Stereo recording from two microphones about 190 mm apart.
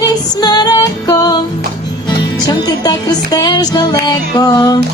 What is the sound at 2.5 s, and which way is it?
Music, 20° left (ahead or behind).